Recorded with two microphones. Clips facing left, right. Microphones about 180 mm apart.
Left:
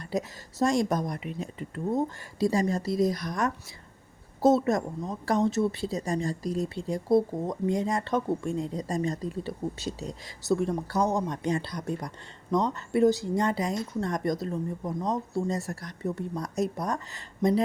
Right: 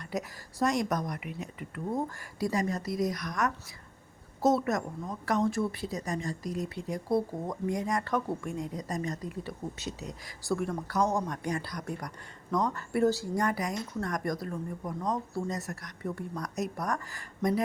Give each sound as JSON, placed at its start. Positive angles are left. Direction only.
{"t": 0.0, "sound": "a woman's voice", "side_deg": 30}